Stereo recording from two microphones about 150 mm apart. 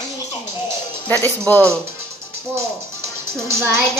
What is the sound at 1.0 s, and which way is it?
Speech, 15° left (ahead or behind).